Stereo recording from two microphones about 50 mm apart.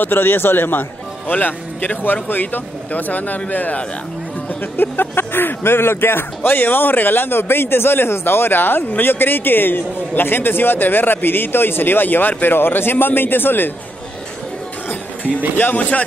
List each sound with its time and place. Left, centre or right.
0.0 s a man's voice: left
4.7 s a man's voice: left
14.9 s music: left
15.5 s a man's voice: left